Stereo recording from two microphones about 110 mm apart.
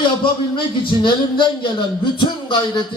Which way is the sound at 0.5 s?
50° left (ahead or behind).